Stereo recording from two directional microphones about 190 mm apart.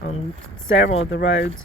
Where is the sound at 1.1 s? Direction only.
70° left (ahead or behind).